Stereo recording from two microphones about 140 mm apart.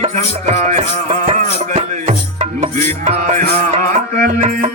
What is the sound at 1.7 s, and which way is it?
Music, 60° right (ahead or behind).